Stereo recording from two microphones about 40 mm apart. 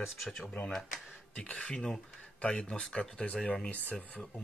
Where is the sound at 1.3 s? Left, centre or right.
Left.